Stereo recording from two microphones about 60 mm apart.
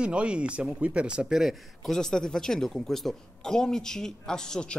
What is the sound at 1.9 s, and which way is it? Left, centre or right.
A woman's voice, centre.